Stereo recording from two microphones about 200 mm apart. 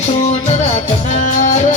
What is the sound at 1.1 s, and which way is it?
Music, 40° left (ahead or behind).